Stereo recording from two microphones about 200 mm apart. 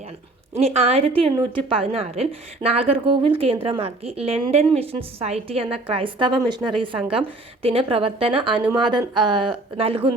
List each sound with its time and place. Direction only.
0.5 s a woman's voice: 30° right (ahead or behind)